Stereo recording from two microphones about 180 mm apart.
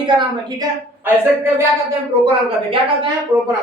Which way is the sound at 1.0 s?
10° right (ahead or behind).